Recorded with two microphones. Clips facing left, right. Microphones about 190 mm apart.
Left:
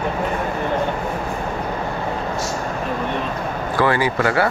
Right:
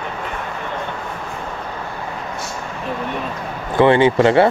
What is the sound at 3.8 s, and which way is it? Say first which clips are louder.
Speech: right 7 dB; 25° right (ahead or behind).